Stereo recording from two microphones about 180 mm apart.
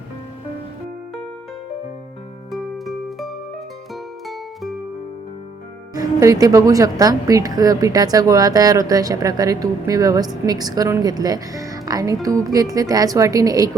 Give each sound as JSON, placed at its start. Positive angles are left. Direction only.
{"t": 2.5, "sound": "music", "side_deg": 0}
{"t": 5.9, "sound": "speech", "side_deg": -20}